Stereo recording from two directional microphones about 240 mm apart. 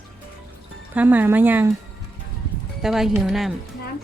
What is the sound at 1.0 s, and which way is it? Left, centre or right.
Speech, centre.